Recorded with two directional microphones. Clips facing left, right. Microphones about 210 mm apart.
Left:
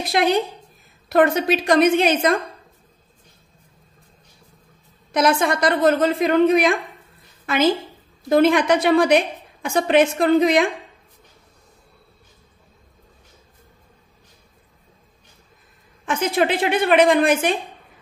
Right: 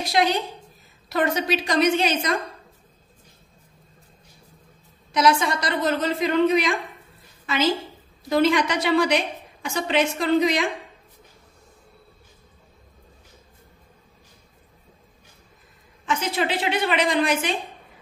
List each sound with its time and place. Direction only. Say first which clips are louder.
0.0 s a woman's voice: left 3 dB; 55° left (ahead or behind)
5.1 s a woman's voice: left 2 dB; 55° left (ahead or behind)
16.1 s a woman's voice: left 5 dB; 50° left (ahead or behind)